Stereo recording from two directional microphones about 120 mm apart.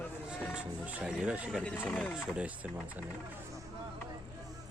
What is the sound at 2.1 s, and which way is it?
Speech, 10° right (ahead or behind).